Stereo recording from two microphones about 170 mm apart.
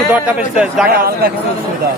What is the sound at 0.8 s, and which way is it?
Speech, 60° right (ahead or behind).